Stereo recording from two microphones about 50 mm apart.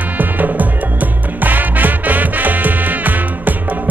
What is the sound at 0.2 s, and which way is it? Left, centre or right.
Music, right.